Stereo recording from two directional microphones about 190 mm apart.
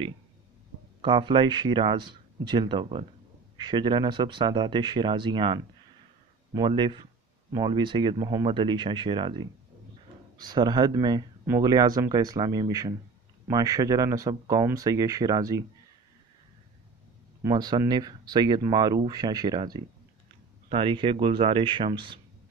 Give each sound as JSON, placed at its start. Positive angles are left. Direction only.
{"t": 1.0, "sound": "speech", "side_deg": -25}
{"t": 17.4, "sound": "speech", "side_deg": -20}